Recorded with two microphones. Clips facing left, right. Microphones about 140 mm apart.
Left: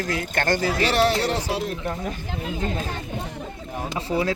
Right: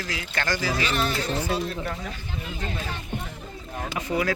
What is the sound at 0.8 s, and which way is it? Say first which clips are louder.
Music: left 6 dB; 80° left.